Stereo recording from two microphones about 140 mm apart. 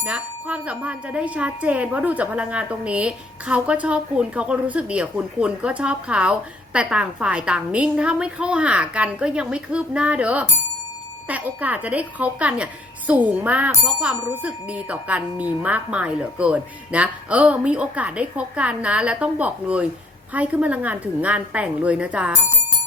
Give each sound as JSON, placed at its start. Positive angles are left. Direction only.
{"t": 0.0, "sound": "speech", "side_deg": -10}